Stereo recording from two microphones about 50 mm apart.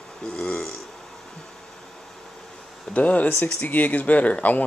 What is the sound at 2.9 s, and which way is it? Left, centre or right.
Speech, left.